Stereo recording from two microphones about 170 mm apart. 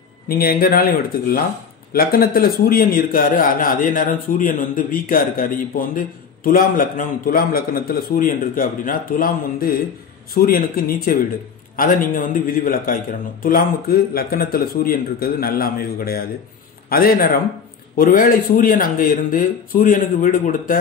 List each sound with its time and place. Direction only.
0.3 s a man's voice: 60° left (ahead or behind)